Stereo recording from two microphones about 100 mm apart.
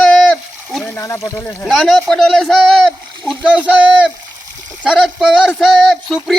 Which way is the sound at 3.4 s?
10° right (ahead or behind).